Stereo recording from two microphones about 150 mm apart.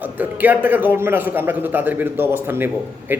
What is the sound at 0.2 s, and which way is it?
A man's voice, 10° right (ahead or behind).